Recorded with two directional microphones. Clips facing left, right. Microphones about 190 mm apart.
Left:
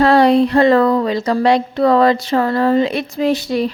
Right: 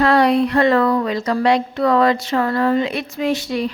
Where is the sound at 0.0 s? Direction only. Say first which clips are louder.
Left 4 dB; 30° left (ahead or behind).